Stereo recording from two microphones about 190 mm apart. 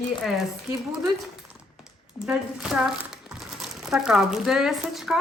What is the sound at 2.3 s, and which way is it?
Speech, 5° right (ahead or behind).